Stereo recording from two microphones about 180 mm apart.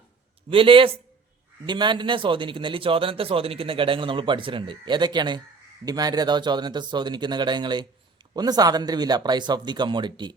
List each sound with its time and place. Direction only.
0.5 s a man's voice: 30° right (ahead or behind)